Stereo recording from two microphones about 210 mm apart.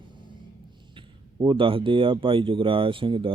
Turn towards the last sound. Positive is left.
turn(degrees=-25)  # may be behind; listen again after turning